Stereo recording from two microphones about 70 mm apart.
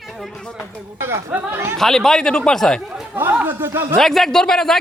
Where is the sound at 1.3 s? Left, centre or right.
Right.